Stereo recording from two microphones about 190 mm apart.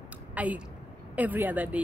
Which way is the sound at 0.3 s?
10° right (ahead or behind).